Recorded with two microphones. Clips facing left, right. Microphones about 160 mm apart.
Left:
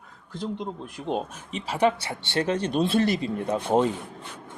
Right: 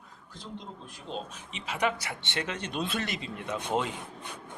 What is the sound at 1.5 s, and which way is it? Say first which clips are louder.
Speech: left 7 dB; 35° left (ahead or behind).